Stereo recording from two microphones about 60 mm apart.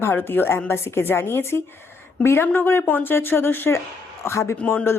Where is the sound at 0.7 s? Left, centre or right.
Left.